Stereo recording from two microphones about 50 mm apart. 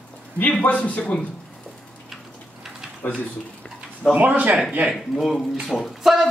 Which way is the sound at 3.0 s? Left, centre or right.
Left.